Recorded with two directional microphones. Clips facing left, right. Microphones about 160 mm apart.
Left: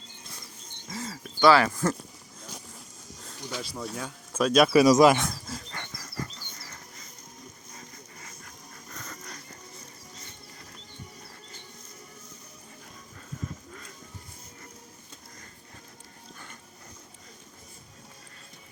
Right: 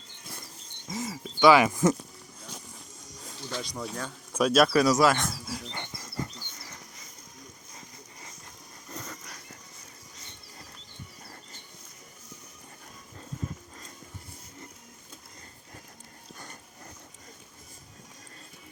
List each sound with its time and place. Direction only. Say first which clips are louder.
0.9 s speech: right 3 dB; 15° right (ahead or behind)
3.5 s speech: even; 5° left (ahead or behind)
4.4 s speech: left 1 dB; 10° right (ahead or behind)
4.6 s speech: left 6 dB; 10° left (ahead or behind)
5.2 s a sound: even; 5° right (ahead or behind)
5.7 s dog: right 1 dB; 25° right (ahead or behind)
9.0 s dog: left 1 dB; 5° right (ahead or behind)